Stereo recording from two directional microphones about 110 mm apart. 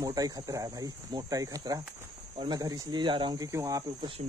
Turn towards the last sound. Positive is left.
turn(degrees=-30)  # may be behind; listen again after turning